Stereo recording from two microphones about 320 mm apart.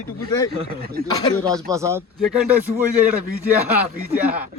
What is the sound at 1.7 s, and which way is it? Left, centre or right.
Speech, centre.